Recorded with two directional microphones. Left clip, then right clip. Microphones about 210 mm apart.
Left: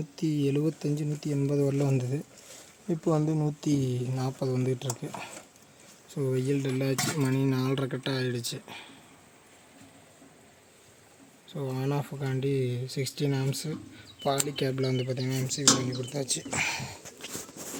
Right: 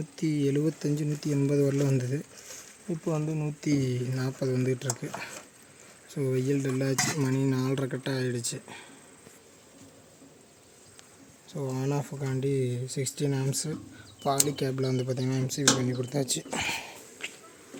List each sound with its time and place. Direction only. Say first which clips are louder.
0.2 s speech: right 1 dB; centre (ahead or behind)
3.0 s speech: left 4 dB; 20° left (ahead or behind)
3.7 s speech: right 3 dB; centre (ahead or behind)
11.4 s speech: even; centre (ahead or behind)
16.6 s speech: even; 5° left (ahead or behind)